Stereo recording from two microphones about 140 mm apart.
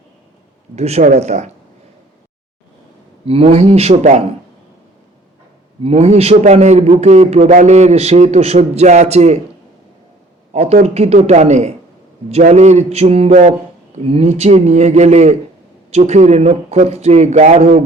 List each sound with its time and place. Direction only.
0.8 s a man's voice: 50° right (ahead or behind)
3.2 s a man's voice: 45° right (ahead or behind)
5.8 s a man's voice: 50° right (ahead or behind)
10.5 s a man's voice: 55° right (ahead or behind)